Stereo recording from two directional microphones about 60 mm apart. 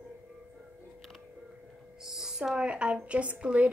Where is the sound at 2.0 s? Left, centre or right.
Centre.